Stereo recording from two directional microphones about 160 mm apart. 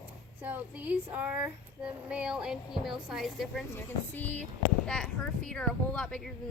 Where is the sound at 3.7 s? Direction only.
10° left (ahead or behind).